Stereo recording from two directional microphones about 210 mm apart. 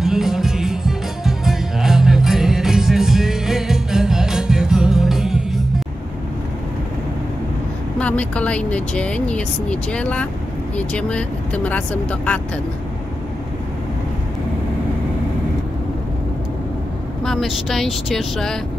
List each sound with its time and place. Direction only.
0.0 s music: centre (ahead or behind)
8.0 s speech: 5° left (ahead or behind)
17.2 s speech: centre (ahead or behind)